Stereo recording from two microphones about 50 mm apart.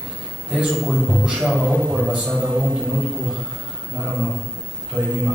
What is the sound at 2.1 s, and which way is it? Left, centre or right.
Mantra, centre.